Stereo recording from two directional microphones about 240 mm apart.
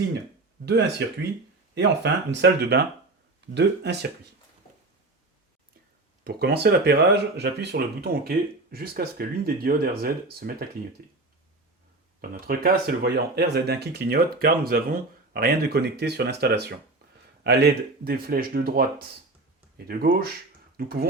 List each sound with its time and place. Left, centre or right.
0.6 s speech: right
6.2 s speech: right
12.2 s speech: right